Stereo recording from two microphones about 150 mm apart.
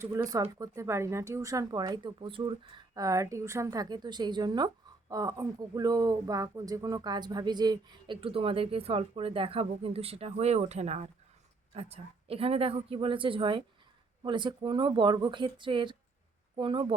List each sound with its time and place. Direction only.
0.0 s speech: 20° right (ahead or behind)